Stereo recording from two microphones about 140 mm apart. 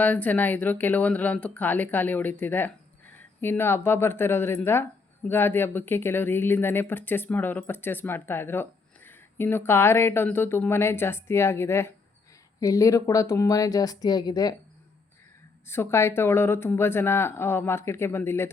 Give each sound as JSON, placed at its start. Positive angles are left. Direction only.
{"t": 0.0, "sound": "a woman's voice", "side_deg": 10}
{"t": 15.6, "sound": "speech", "side_deg": 15}